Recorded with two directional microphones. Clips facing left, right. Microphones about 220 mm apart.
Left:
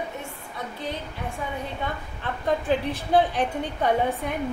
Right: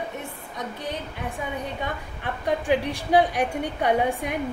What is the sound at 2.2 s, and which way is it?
Speech, 15° right (ahead or behind).